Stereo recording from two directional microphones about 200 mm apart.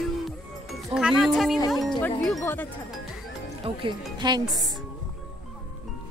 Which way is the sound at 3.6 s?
25° right (ahead or behind).